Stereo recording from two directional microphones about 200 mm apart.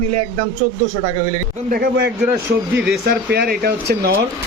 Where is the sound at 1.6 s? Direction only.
45° right (ahead or behind).